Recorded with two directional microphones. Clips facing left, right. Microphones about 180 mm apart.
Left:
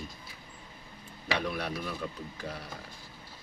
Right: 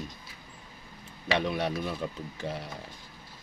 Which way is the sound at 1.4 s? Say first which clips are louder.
Right 4 dB; 20° right (ahead or behind).